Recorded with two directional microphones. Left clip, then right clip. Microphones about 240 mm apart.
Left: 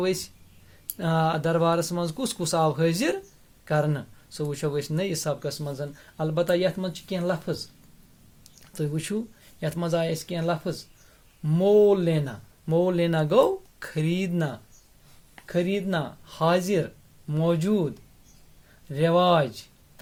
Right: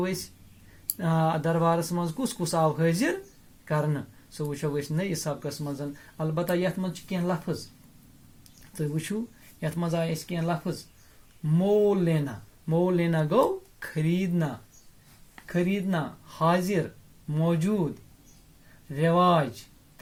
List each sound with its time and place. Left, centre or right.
0.0 s speech: left
8.7 s speech: left
15.4 s speech: left
18.9 s speech: left